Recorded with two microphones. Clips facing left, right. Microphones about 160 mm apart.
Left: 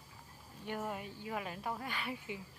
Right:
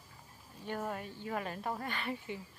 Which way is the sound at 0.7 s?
10° left (ahead or behind).